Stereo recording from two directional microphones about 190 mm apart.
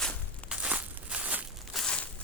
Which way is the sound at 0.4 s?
5° right (ahead or behind).